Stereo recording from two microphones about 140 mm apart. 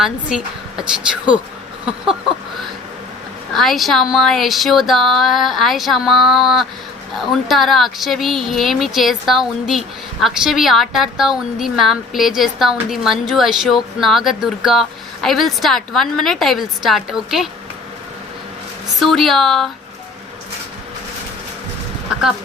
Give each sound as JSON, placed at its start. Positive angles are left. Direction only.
{"t": 0.0, "sound": "speech", "side_deg": -5}
{"t": 3.5, "sound": "speech", "side_deg": 0}
{"t": 18.9, "sound": "speech", "side_deg": 0}